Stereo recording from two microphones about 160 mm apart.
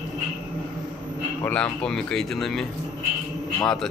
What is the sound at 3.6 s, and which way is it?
Speech, centre (ahead or behind).